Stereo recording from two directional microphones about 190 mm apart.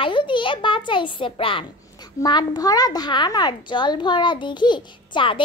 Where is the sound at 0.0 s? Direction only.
25° left (ahead or behind).